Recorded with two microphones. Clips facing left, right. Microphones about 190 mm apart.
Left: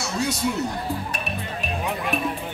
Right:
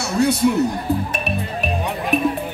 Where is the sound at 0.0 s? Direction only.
60° right (ahead or behind).